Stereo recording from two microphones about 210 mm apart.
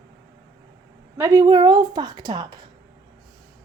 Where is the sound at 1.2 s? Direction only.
15° right (ahead or behind).